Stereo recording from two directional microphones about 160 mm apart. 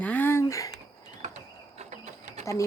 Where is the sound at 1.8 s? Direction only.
45° right (ahead or behind).